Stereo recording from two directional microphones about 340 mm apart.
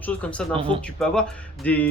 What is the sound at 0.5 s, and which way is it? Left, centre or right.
Speech, centre.